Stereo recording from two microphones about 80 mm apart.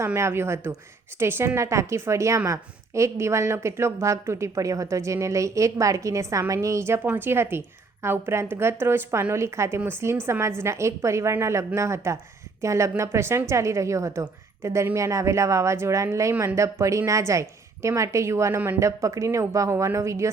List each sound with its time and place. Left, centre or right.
0.0 s a woman's voice: right